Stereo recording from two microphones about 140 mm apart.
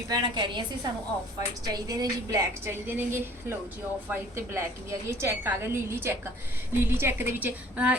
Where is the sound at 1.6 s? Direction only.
30° right (ahead or behind).